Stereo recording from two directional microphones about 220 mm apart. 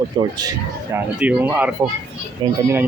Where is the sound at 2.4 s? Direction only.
20° right (ahead or behind).